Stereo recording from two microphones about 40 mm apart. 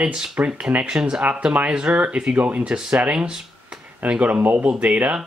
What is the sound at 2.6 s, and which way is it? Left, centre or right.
Speech, right.